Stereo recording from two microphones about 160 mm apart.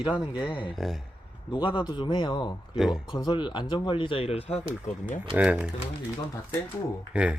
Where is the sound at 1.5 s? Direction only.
30° left (ahead or behind).